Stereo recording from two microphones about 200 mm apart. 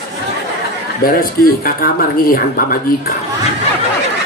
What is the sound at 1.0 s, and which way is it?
Speech, 45° left (ahead or behind).